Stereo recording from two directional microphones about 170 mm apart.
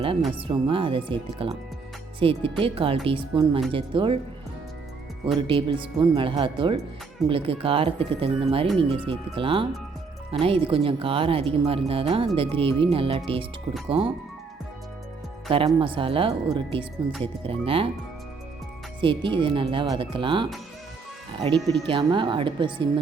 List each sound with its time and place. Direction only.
0.3 s speech: 30° right (ahead or behind)
5.2 s speech: 30° right (ahead or behind)
15.4 s speech: 30° right (ahead or behind)
18.9 s speech: 30° right (ahead or behind)